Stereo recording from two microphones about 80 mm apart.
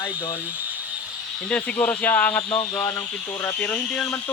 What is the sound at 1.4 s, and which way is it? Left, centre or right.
Speech, centre.